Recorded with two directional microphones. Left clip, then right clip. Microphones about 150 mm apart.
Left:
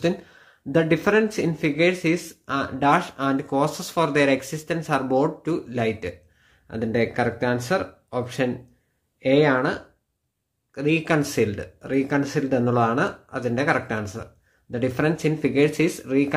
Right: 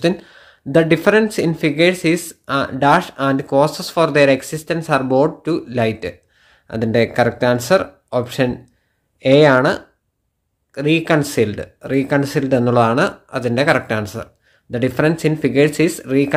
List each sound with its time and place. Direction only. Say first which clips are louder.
0.0 s speech: right 6 dB; 30° right (ahead or behind)